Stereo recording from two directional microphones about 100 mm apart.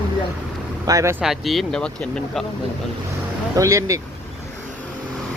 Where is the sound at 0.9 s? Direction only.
35° right (ahead or behind).